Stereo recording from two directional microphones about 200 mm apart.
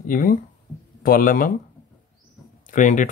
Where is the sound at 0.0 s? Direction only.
45° left (ahead or behind).